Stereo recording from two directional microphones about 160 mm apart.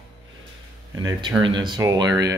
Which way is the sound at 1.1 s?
25° right (ahead or behind).